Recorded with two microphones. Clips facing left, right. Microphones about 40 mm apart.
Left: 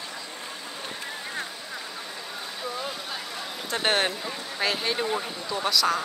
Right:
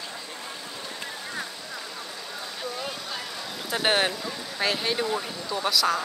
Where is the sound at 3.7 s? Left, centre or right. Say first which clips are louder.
Right 1 dB; centre.